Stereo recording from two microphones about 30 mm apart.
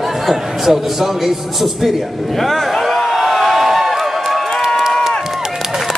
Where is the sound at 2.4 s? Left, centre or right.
Centre.